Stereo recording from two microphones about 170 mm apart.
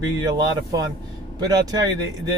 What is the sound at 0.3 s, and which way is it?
Speech, 20° right (ahead or behind).